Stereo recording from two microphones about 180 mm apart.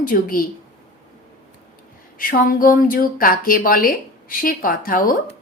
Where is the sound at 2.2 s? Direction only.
50° left (ahead or behind).